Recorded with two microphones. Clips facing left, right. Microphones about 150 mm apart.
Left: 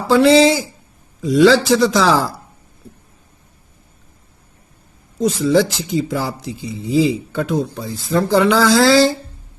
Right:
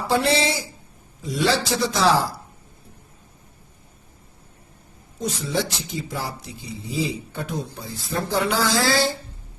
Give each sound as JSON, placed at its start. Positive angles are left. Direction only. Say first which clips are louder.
{"t": 0.1, "sound": "speech", "louder": "left 11 dB", "side_deg": 90}
{"t": 5.2, "sound": "speech", "louder": "left 11 dB", "side_deg": 90}